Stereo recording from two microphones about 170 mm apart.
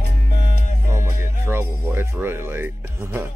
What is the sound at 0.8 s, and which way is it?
Music, 15° right (ahead or behind).